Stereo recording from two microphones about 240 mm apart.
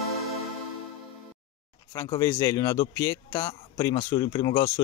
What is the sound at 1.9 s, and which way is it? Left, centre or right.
A man's voice, centre.